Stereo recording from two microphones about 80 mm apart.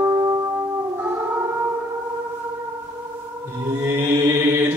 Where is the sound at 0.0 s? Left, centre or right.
Right.